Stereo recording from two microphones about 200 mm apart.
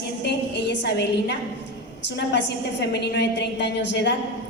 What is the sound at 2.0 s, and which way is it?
A woman's voice, 60° left (ahead or behind).